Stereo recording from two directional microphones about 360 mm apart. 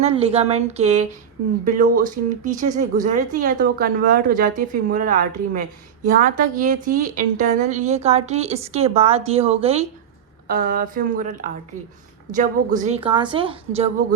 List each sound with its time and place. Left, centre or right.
0.0 s a woman's voice: centre